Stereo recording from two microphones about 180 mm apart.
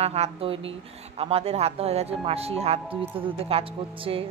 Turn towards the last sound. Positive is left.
turn(degrees=-30)  # may be behind; listen again after turning